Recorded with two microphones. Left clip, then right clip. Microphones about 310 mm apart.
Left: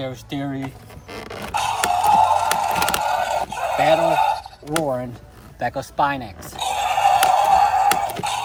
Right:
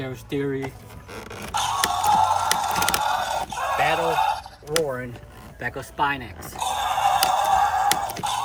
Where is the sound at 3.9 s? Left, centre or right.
Left.